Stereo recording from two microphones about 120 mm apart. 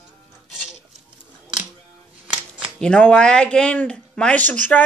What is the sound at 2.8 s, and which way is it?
Speech, 5° left (ahead or behind).